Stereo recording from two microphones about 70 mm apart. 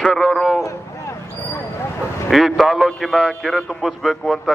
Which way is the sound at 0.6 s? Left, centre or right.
Left.